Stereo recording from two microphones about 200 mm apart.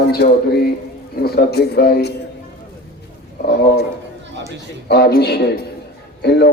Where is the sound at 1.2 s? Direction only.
50° left (ahead or behind).